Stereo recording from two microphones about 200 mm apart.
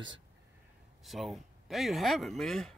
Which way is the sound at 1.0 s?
Centre (ahead or behind).